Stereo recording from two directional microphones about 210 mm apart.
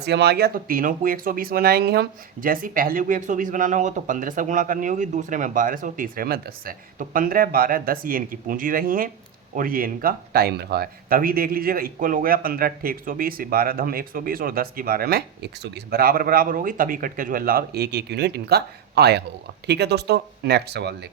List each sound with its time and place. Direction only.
0.0 s speech: 50° right (ahead or behind)